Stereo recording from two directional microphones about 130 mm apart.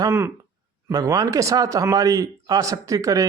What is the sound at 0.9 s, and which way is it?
Speech, 30° right (ahead or behind).